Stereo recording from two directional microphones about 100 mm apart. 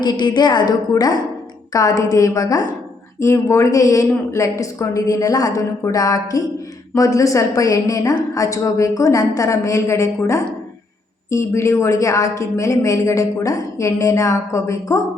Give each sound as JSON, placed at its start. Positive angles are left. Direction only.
{"t": 0.0, "sound": "a woman's voice", "side_deg": 50}